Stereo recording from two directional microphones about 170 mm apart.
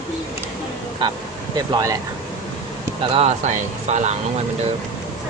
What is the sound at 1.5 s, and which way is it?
Speech, 20° right (ahead or behind).